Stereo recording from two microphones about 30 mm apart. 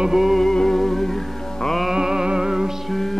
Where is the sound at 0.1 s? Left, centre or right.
Centre.